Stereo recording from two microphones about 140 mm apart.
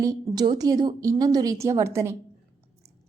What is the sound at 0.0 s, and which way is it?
A woman's voice, 25° right (ahead or behind).